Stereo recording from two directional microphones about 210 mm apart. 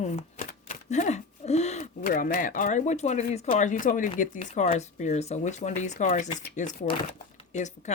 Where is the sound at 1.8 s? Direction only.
40° left (ahead or behind).